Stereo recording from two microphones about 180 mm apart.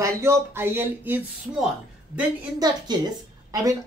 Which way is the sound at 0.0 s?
15° right (ahead or behind).